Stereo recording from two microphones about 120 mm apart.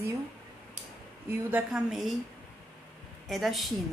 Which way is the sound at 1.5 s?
15° right (ahead or behind).